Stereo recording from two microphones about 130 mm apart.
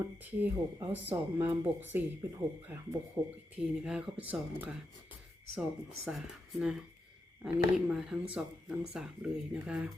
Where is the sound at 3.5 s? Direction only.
5° right (ahead or behind).